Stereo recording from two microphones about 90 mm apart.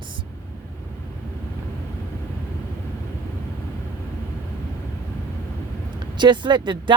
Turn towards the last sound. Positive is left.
turn(degrees=-60)  # may be behind; listen again after turning